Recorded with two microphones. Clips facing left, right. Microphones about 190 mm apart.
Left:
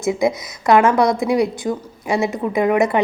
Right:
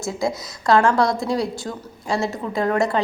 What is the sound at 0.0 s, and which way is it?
A woman's voice, 20° left (ahead or behind).